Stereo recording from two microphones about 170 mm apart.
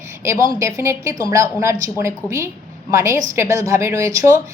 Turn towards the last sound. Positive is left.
turn(degrees=-15)  # may be behind; listen again after turning